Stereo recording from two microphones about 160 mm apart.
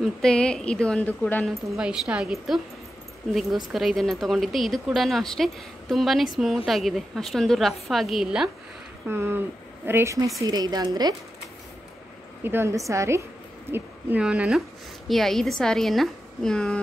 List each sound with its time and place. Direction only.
0.0 s speech: 5° left (ahead or behind)
3.7 s speech: centre (ahead or behind)
9.1 s speech: 15° right (ahead or behind)
12.4 s speech: 15° right (ahead or behind); by 16.8 s 5° left (ahead or behind)